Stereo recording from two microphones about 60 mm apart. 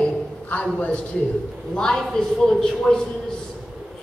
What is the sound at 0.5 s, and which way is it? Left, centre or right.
Speech, left.